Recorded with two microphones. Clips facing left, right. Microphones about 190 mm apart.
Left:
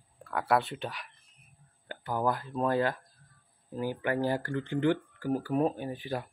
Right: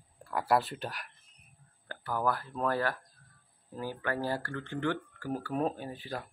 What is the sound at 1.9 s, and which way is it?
Speech, 20° left (ahead or behind).